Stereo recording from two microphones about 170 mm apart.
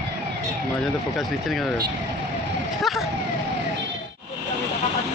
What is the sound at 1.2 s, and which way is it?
Speech, centre (ahead or behind).